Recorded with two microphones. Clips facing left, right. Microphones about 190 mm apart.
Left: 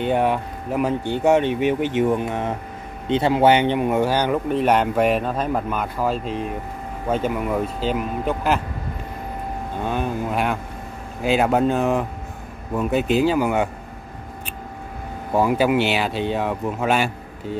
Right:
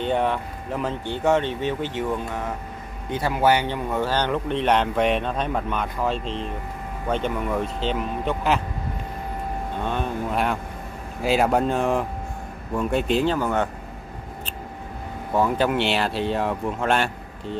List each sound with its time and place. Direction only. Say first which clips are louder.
0.0 s a man's voice: left 3 dB; 10° left (ahead or behind)
9.8 s speech: left 3 dB; 5° left (ahead or behind)
15.3 s speech: left 3 dB; 10° left (ahead or behind)